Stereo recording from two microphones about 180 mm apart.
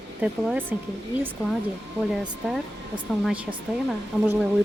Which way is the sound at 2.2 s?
Centre (ahead or behind).